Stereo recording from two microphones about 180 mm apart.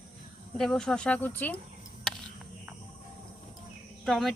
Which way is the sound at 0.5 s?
5° left (ahead or behind).